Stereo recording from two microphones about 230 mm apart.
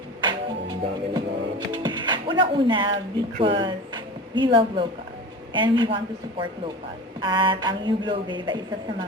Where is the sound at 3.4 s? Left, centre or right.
Right.